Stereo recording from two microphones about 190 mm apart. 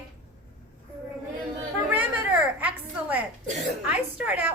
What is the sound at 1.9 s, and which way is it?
A woman's voice, 10° right (ahead or behind).